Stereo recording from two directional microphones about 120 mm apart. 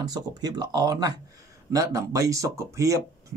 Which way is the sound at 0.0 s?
35° right (ahead or behind).